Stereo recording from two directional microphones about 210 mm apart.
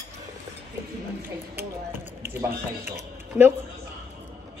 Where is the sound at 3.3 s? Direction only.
10° right (ahead or behind).